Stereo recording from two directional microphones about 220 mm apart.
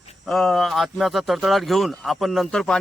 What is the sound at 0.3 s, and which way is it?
Speech, centre (ahead or behind).